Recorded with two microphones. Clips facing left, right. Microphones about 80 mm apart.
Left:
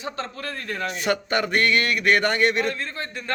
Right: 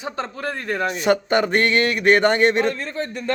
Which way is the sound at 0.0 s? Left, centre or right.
Centre.